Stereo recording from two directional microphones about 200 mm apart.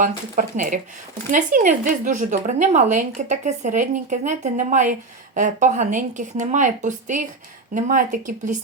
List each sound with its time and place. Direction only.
0.0 s a woman's voice: 40° right (ahead or behind)